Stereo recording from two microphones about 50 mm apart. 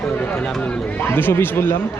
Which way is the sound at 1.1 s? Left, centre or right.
Left.